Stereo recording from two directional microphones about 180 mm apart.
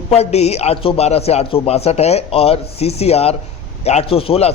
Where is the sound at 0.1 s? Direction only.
35° left (ahead or behind).